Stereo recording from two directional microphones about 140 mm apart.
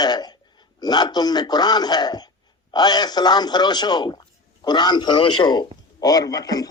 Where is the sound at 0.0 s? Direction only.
30° left (ahead or behind).